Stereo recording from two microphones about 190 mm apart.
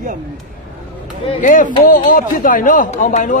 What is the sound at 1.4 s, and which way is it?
Speech, 40° left (ahead or behind).